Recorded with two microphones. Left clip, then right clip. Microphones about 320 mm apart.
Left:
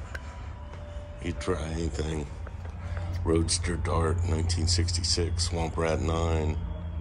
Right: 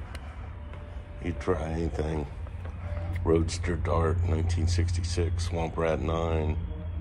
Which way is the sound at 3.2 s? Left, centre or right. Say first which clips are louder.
Right 1 dB; centre.